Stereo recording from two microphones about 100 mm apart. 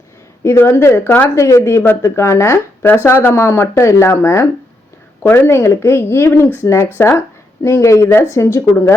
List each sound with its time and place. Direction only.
0.4 s speech: 30° left (ahead or behind)